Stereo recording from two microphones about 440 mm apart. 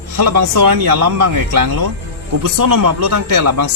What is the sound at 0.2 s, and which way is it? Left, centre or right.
Speech, right.